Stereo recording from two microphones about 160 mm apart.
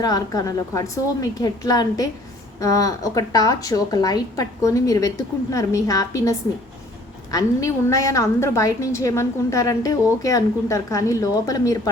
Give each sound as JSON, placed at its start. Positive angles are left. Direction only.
{"t": 0.0, "sound": "a woman's voice", "side_deg": 25}